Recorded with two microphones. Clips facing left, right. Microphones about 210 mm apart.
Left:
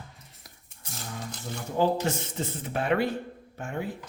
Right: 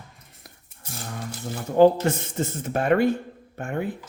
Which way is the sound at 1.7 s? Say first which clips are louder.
Right 9 dB; 55° right (ahead or behind).